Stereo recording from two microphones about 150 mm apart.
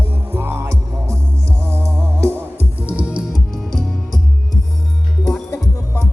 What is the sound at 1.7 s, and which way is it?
Music, 15° right (ahead or behind).